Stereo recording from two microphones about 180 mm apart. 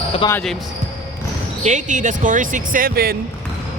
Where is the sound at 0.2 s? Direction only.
25° left (ahead or behind).